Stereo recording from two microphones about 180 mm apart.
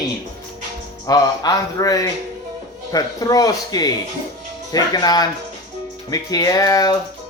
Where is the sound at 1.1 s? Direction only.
20° left (ahead or behind).